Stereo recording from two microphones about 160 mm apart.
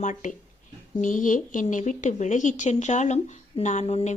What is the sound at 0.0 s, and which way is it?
Speech, 50° left (ahead or behind).